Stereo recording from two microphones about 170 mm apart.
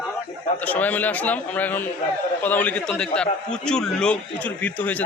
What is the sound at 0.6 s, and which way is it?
A man's voice, 10° left (ahead or behind).